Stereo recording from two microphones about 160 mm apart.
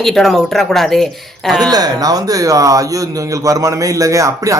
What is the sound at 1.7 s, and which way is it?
Speech, 25° right (ahead or behind).